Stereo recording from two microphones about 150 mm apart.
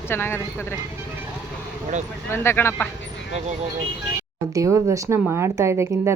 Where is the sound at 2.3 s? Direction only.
15° left (ahead or behind).